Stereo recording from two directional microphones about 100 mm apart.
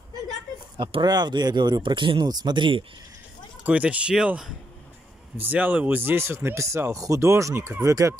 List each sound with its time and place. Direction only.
0.7 s speech: 50° right (ahead or behind)
3.6 s speech: 15° right (ahead or behind); by 8.2 s 30° right (ahead or behind)